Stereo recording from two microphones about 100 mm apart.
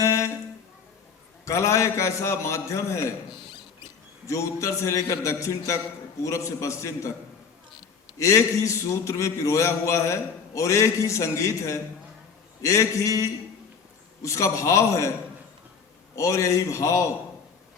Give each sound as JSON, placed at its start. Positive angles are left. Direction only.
{"t": 0.0, "sound": "a sound", "side_deg": 30}
{"t": 1.5, "sound": "a man's voice", "side_deg": 30}
{"t": 4.3, "sound": "a man's voice", "side_deg": 30}
{"t": 8.2, "sound": "a man's voice", "side_deg": 30}
{"t": 16.1, "sound": "a man's voice", "side_deg": 30}